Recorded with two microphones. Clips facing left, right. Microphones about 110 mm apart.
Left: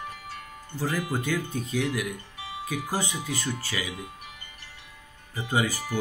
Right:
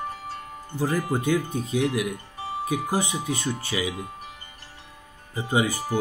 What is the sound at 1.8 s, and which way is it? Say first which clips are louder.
Music: right 4 dB; 35° right (ahead or behind).